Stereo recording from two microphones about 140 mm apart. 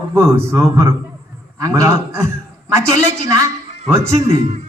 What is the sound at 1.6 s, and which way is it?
Speech, 20° right (ahead or behind).